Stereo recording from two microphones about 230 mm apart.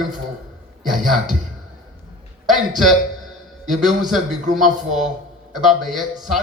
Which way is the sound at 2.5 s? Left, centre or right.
Centre.